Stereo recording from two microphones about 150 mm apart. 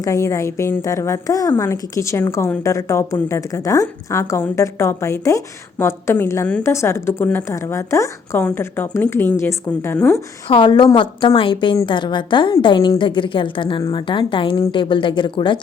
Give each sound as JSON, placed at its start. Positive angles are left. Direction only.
{"t": 0.0, "sound": "a woman's voice", "side_deg": 20}
{"t": 10.5, "sound": "a woman's voice", "side_deg": 30}